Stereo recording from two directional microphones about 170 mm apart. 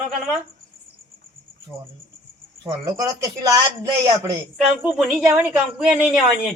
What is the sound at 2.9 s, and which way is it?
Speech, 20° right (ahead or behind).